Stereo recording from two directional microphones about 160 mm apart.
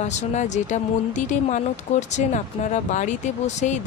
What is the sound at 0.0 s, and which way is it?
Speech, 45° left (ahead or behind).